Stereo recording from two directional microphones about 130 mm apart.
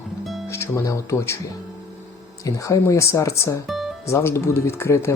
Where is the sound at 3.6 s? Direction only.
Centre (ahead or behind).